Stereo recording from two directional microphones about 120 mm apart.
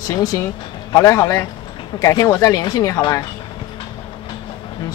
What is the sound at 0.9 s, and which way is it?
Speech, 25° left (ahead or behind).